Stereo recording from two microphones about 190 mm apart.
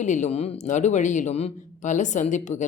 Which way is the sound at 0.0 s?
40° left (ahead or behind).